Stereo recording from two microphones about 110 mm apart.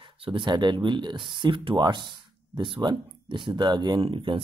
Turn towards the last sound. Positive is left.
turn(degrees=-50)  # may be behind; listen again after turning